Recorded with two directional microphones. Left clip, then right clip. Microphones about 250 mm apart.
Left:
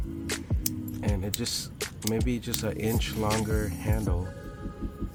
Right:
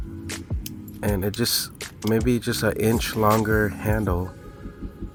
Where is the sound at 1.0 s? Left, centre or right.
Right.